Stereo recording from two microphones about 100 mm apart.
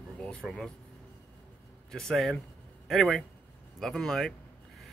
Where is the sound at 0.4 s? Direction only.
5° left (ahead or behind).